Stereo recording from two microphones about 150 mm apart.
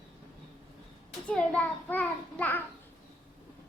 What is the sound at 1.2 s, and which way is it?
A child's voice, 10° left (ahead or behind).